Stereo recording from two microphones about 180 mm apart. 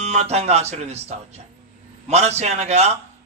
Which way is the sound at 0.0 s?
35° right (ahead or behind).